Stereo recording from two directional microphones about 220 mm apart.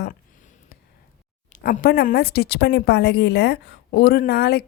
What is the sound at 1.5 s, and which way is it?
Speech, 40° left (ahead or behind).